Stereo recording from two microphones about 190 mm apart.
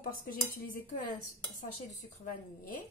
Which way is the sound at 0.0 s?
50° left (ahead or behind).